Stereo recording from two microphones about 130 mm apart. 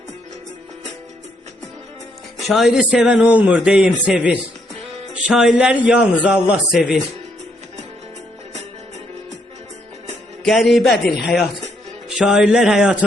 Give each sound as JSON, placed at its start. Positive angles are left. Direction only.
{"t": 2.5, "sound": "a man's voice", "side_deg": 0}
{"t": 10.4, "sound": "a man's voice", "side_deg": 0}